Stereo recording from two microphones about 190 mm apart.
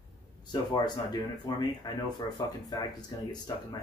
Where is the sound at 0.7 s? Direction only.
20° left (ahead or behind).